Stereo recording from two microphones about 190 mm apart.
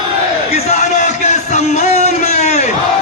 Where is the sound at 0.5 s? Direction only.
35° left (ahead or behind).